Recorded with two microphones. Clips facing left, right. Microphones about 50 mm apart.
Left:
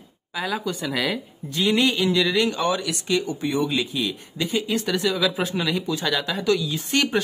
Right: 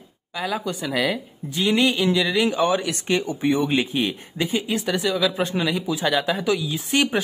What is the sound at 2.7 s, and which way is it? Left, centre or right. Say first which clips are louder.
Speech: right 1 dB; right.